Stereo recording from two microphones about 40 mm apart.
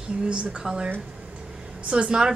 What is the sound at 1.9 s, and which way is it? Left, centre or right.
Speech, right.